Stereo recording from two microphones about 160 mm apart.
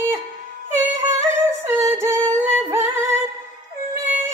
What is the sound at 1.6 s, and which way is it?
Music, 15° right (ahead or behind).